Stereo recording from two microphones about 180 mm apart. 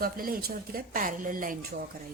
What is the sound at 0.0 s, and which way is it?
A woman's voice, 55° right (ahead or behind).